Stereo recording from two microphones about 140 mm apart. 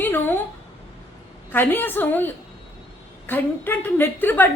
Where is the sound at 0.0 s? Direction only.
15° left (ahead or behind).